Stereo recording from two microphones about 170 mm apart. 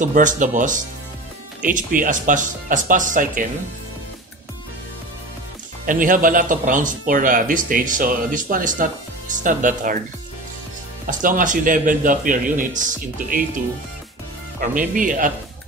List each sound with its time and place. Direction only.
0.0 s speech: 50° right (ahead or behind)
5.9 s speech: 55° right (ahead or behind)
11.1 s speech: 50° right (ahead or behind)
14.8 s speech: 50° right (ahead or behind)